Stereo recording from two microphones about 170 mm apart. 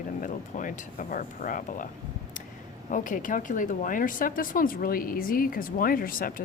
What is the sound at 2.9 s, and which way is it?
Speech, 50° left (ahead or behind).